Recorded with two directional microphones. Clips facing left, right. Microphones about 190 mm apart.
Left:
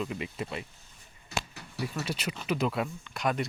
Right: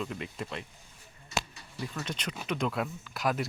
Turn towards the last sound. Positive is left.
turn(degrees=0)  # may be behind; listen again after turning